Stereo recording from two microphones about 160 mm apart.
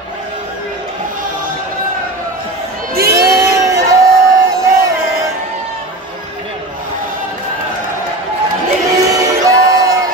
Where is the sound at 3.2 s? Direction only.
20° right (ahead or behind).